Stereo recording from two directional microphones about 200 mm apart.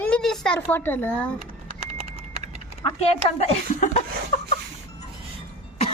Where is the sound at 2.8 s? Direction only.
30° left (ahead or behind).